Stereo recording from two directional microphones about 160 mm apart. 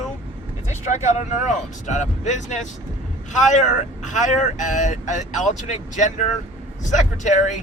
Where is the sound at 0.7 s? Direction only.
45° left (ahead or behind).